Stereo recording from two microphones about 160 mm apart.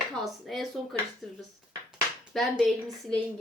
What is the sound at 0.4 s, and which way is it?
Speech, centre (ahead or behind).